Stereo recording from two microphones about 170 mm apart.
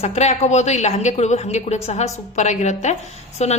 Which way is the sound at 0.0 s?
40° left (ahead or behind).